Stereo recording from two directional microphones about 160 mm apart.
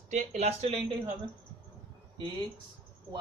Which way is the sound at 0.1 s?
50° right (ahead or behind).